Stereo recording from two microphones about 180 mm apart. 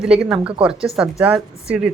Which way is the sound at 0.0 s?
5° right (ahead or behind).